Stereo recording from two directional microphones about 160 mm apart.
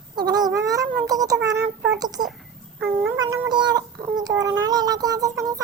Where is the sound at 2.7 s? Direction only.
15° right (ahead or behind).